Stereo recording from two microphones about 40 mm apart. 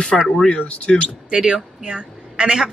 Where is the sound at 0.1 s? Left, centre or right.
Centre.